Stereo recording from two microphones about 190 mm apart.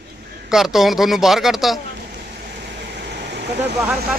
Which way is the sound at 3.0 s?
65° right (ahead or behind).